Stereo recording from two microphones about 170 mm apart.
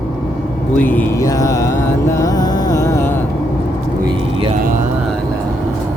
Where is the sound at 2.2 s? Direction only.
20° left (ahead or behind).